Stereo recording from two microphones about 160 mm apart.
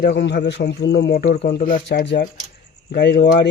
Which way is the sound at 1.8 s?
80° left.